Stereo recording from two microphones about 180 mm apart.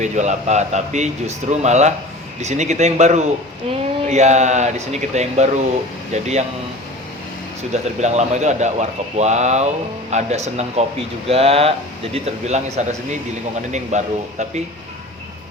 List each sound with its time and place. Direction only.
0.0 s speech: 40° right (ahead or behind)
7.7 s speech: 40° right (ahead or behind)